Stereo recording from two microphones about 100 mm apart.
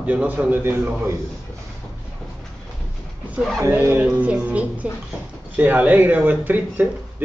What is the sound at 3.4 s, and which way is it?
Speech, 5° left (ahead or behind).